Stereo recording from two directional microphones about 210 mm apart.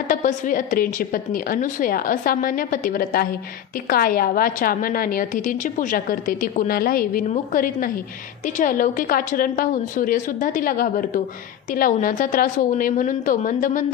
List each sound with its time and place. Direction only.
0.1 s a woman's voice: 35° left (ahead or behind)